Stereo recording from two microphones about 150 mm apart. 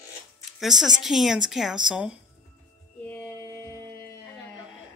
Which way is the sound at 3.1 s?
15° left (ahead or behind).